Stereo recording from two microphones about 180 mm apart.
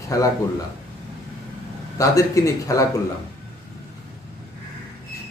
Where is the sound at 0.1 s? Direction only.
20° left (ahead or behind).